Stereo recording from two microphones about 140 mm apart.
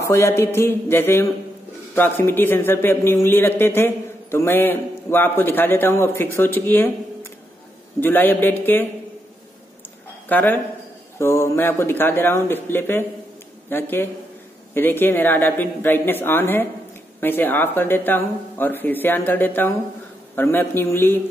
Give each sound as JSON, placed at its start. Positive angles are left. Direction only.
{"t": 0.0, "sound": "a man's voice", "side_deg": 20}
{"t": 8.0, "sound": "a man's voice", "side_deg": 15}
{"t": 10.2, "sound": "a man's voice", "side_deg": 15}